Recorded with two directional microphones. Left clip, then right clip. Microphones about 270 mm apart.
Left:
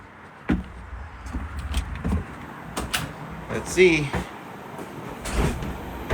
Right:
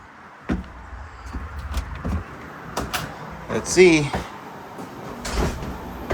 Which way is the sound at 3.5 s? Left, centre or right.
Right.